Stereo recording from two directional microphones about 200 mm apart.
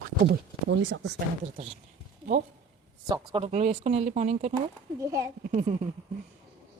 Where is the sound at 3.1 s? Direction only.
30° right (ahead or behind).